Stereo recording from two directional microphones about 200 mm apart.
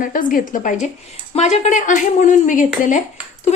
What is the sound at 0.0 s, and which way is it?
Speech, 45° left (ahead or behind).